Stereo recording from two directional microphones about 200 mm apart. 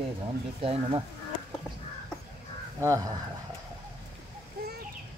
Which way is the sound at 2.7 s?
15° right (ahead or behind).